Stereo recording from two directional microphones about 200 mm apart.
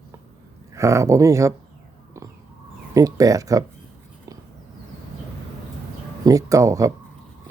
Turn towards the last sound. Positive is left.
turn(degrees=-15)  # may be behind; listen again after turning